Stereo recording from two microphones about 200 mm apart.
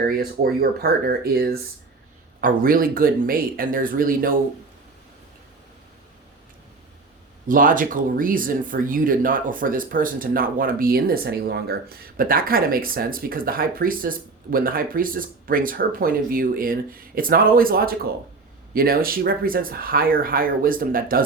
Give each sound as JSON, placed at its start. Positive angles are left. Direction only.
{"t": 0.2, "sound": "speech", "side_deg": -50}
{"t": 7.4, "sound": "speech", "side_deg": -45}